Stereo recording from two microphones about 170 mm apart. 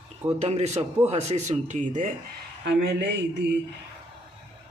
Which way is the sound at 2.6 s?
90° right.